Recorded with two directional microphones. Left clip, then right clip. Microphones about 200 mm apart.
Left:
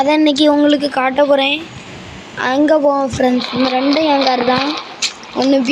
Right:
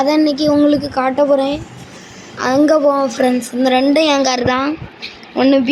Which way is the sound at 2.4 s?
Centre (ahead or behind).